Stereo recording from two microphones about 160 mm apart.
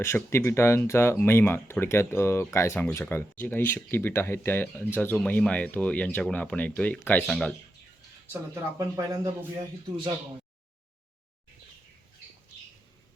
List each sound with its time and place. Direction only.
0.0 s speech: 15° left (ahead or behind)
8.8 s speech: 20° right (ahead or behind)